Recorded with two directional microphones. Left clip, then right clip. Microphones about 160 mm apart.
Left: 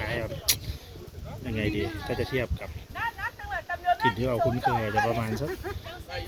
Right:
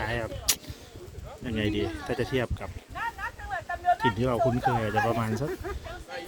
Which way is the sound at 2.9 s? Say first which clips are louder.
Left 2 dB; 90° right.